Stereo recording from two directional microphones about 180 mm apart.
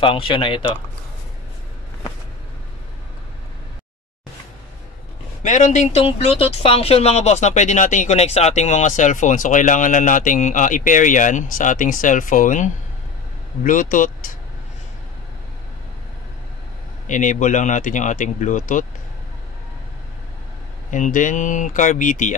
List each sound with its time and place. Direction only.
0.0 s speech: 30° left (ahead or behind)
5.4 s speech: 40° left (ahead or behind)
17.1 s speech: 45° left (ahead or behind)
20.9 s speech: 45° left (ahead or behind)